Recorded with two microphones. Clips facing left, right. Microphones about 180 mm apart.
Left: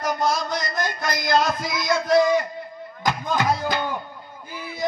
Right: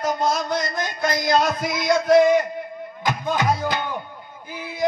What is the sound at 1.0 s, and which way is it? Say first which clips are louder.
Music: right 2 dB; 20° right (ahead or behind).